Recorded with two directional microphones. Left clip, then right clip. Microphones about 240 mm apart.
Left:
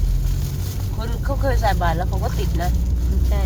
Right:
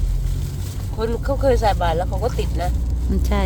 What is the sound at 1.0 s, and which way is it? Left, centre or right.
Speech, right.